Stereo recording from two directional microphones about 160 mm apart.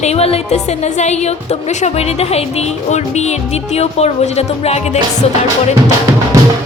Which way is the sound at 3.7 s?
40° left (ahead or behind).